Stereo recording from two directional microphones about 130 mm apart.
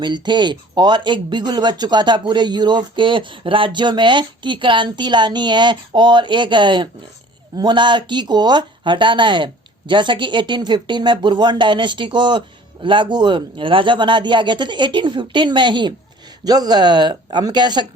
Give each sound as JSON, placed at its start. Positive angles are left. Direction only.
{"t": 0.0, "sound": "speech", "side_deg": -35}